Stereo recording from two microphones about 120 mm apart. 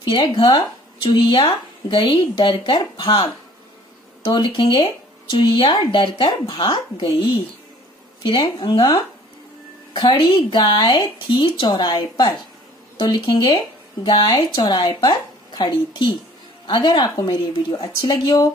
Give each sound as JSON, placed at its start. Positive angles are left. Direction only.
{"t": 0.0, "sound": "a woman's voice", "side_deg": 40}